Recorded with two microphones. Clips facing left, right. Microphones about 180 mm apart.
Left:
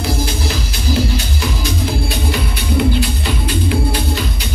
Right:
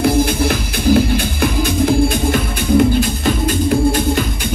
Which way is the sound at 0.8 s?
55° right (ahead or behind).